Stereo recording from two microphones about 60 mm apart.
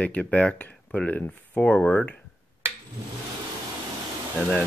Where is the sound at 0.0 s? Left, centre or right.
Left.